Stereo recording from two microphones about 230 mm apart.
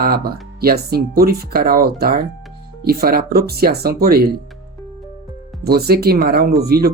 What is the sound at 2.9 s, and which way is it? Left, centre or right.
Speech, right.